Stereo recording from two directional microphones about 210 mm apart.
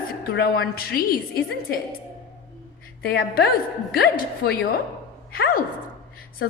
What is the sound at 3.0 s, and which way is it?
A woman's voice, 50° left (ahead or behind).